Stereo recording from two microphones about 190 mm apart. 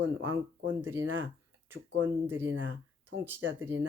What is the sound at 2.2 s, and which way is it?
Speech, 10° right (ahead or behind).